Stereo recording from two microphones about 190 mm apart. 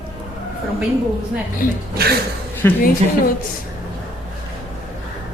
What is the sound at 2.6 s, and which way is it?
Speech, 10° left (ahead or behind).